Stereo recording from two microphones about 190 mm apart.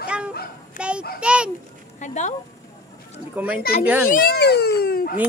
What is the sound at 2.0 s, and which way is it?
Speech, 40° left (ahead or behind).